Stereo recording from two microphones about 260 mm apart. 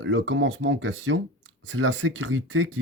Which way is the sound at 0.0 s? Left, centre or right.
Right.